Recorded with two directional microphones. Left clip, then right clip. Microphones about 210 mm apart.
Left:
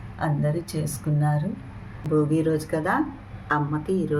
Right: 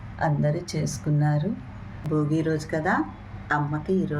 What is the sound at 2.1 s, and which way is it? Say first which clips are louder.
Speech: left 3 dB; 10° left (ahead or behind).